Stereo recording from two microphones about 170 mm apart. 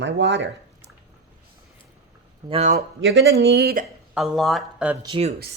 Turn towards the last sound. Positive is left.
turn(degrees=-35)  # may be behind; listen again after turning